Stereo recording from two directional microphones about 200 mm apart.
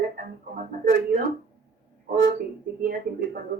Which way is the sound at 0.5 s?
45° right (ahead or behind).